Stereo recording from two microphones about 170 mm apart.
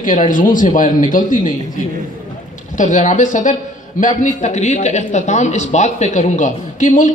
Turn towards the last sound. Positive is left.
turn(degrees=50)  # may be behind; listen again after turning